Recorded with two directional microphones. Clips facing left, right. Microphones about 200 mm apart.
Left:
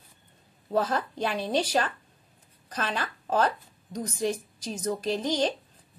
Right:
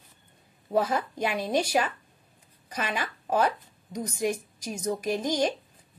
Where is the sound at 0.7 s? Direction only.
10° right (ahead or behind).